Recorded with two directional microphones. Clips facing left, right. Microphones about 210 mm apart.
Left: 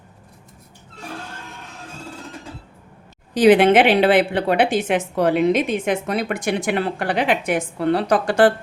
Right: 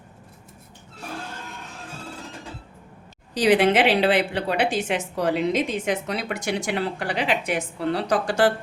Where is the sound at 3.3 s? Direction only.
55° left (ahead or behind).